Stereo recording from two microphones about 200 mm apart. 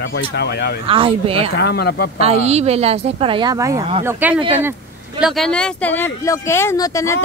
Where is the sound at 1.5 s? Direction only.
55° left (ahead or behind).